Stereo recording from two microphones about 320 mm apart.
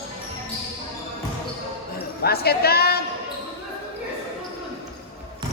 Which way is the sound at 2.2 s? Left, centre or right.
Left.